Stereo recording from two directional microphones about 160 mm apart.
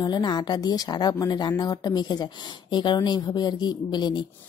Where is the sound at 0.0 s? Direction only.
25° left (ahead or behind).